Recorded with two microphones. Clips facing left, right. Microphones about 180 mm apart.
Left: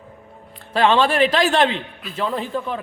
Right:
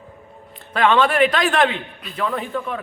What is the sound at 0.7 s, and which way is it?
A man's voice, 30° left (ahead or behind).